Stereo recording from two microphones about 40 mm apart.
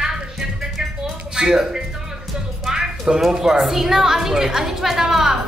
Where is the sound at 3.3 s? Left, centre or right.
Centre.